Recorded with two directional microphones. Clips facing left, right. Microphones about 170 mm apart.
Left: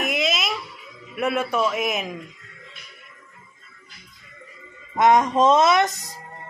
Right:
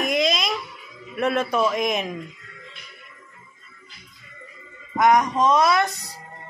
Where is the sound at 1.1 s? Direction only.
10° left (ahead or behind).